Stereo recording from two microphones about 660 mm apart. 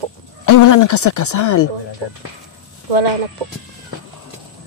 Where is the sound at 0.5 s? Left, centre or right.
Left.